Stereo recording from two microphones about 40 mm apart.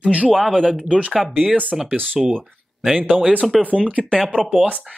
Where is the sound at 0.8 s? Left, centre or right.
Right.